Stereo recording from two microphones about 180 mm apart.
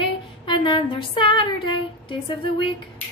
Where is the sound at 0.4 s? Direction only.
25° left (ahead or behind).